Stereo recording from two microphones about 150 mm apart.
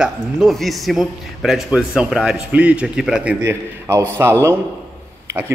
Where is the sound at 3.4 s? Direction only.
15° right (ahead or behind).